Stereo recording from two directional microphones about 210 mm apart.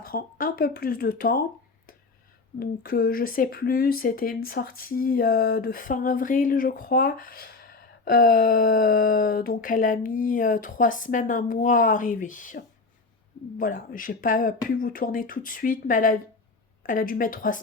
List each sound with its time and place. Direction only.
0.0 s speech: 45° left (ahead or behind)
2.6 s speech: 45° left (ahead or behind)